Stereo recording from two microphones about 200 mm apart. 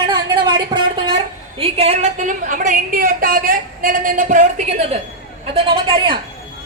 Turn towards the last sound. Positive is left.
turn(degrees=-25)  # may be behind; listen again after turning